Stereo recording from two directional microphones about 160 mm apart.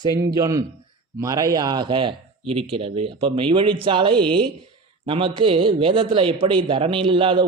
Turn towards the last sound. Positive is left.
turn(degrees=-35)  # may be behind; listen again after turning